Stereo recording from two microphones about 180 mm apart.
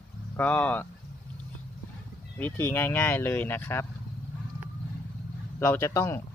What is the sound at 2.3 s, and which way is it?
Speech, 10° left (ahead or behind).